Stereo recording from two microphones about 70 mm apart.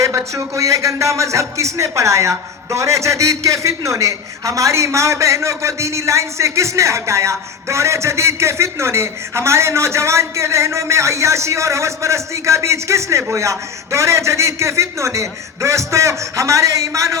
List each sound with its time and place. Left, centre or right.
0.3 s a man's voice: right